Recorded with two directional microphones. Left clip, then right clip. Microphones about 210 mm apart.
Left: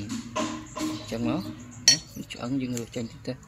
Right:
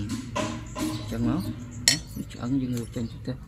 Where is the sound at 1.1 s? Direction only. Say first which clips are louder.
Even; 20° left (ahead or behind).